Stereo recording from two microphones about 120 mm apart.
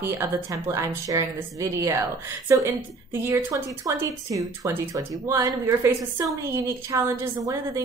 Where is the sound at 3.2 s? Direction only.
20° right (ahead or behind).